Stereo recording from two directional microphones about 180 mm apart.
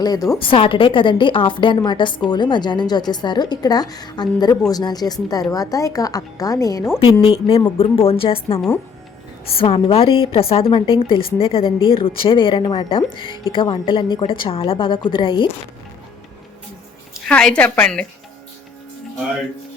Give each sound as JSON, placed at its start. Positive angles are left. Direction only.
{"t": 0.0, "sound": "a woman's voice", "side_deg": 20}
{"t": 7.0, "sound": "a woman's voice", "side_deg": 30}
{"t": 9.5, "sound": "a woman's voice", "side_deg": 30}
{"t": 17.2, "sound": "a woman's voice", "side_deg": 5}